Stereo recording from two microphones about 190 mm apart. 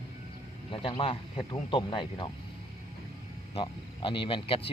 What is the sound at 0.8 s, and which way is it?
Speech, 30° left (ahead or behind).